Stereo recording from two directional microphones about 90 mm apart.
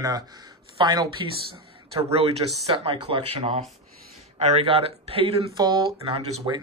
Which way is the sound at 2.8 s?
85° right.